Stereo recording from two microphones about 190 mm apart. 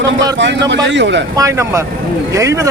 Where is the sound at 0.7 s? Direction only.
70° right (ahead or behind).